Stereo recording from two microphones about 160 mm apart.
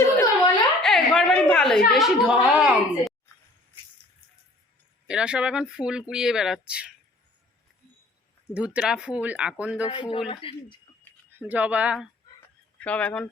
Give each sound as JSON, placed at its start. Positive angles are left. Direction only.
{"t": 0.2, "sound": "a sound", "side_deg": 10}
{"t": 2.0, "sound": "speech", "side_deg": -5}
{"t": 5.0, "sound": "speech", "side_deg": -5}
{"t": 8.5, "sound": "speech", "side_deg": -10}
{"t": 9.9, "sound": "speech", "side_deg": 35}
{"t": 11.3, "sound": "speech", "side_deg": -10}
{"t": 12.8, "sound": "speech", "side_deg": 10}